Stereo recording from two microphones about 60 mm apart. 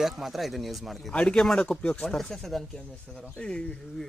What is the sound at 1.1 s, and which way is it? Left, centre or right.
Speech, centre.